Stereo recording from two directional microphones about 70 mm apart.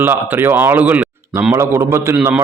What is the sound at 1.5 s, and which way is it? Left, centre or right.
Speech, right.